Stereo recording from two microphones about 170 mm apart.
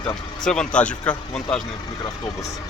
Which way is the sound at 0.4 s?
5° left (ahead or behind).